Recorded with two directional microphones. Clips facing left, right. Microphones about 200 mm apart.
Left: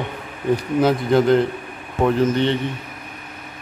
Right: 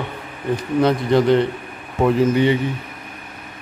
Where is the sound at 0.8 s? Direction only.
Centre (ahead or behind).